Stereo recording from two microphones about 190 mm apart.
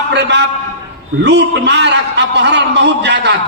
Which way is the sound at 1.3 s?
65° right (ahead or behind).